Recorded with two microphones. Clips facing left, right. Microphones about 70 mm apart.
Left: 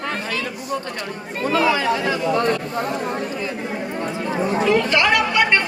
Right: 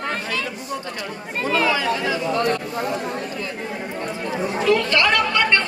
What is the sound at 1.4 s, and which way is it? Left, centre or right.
Chatter, right.